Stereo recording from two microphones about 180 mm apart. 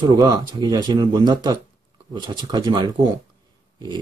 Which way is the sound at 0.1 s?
20° right (ahead or behind).